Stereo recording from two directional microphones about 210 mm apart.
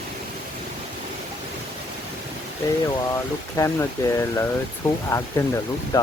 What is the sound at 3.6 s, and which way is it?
Speech, 15° left (ahead or behind).